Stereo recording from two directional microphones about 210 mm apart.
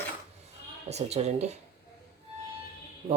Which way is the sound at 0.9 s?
30° right (ahead or behind).